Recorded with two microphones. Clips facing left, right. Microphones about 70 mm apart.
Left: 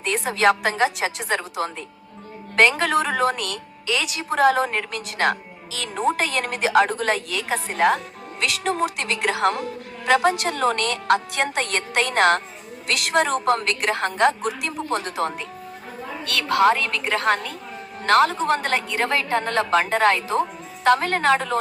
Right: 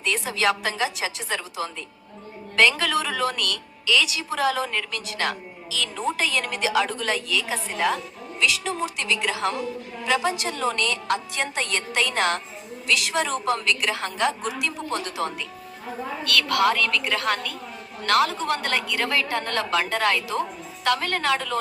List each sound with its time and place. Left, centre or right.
0.0 s a woman's voice: left
16.2 s a woman's voice: left